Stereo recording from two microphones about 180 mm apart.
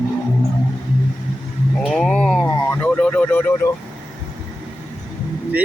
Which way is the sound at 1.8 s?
Centre (ahead or behind).